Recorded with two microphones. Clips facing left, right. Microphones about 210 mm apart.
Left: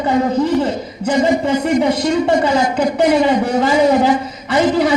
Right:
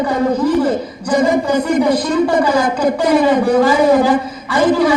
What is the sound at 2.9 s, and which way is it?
Speech, 25° left (ahead or behind).